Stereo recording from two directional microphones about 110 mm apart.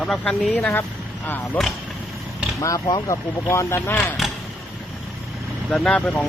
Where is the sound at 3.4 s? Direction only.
25° left (ahead or behind).